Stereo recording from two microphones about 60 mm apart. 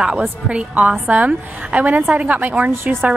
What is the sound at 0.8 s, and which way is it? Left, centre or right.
A woman's voice, right.